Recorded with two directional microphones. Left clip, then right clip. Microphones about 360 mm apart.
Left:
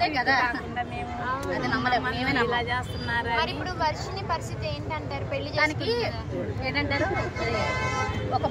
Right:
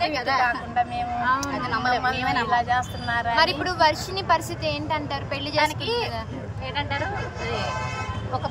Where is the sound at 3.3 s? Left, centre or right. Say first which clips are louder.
Right 7 dB; right.